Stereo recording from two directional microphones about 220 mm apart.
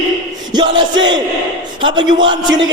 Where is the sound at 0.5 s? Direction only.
20° right (ahead or behind).